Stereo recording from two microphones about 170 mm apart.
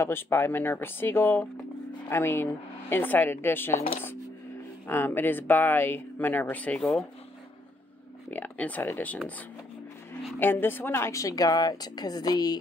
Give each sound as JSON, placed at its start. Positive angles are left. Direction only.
{"t": 0.0, "sound": "speech", "side_deg": 15}
{"t": 4.8, "sound": "speech", "side_deg": 10}
{"t": 8.3, "sound": "speech", "side_deg": 10}
{"t": 10.4, "sound": "a woman's voice", "side_deg": 10}